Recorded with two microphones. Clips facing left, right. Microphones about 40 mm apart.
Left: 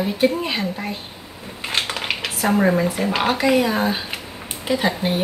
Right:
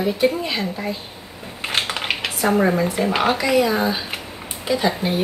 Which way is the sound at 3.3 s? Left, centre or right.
Left.